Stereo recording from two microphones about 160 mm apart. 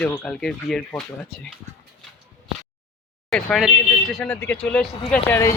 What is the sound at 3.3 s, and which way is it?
Speech, centre (ahead or behind).